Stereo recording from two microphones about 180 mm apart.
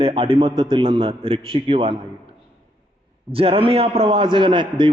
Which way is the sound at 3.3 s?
30° right (ahead or behind).